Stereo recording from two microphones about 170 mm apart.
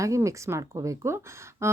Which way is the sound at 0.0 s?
20° right (ahead or behind).